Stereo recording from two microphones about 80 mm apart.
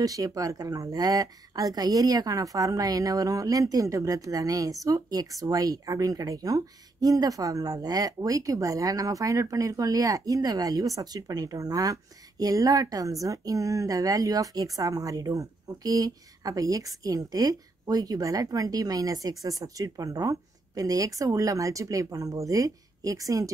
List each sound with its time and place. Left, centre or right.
0.0 s speech: right